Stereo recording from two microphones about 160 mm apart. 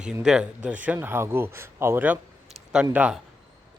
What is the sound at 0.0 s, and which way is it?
A man's voice, 5° right (ahead or behind).